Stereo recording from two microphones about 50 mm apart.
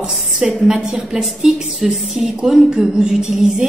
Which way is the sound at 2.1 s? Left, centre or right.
Centre.